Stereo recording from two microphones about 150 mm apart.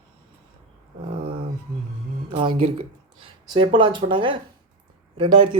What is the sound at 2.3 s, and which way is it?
Speech, 35° right (ahead or behind).